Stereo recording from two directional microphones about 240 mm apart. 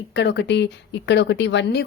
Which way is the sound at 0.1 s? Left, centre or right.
Left.